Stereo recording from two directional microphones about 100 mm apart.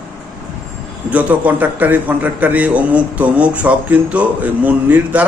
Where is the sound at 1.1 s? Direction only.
15° right (ahead or behind).